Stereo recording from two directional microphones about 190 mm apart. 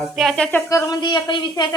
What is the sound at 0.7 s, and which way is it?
Speech, 20° left (ahead or behind).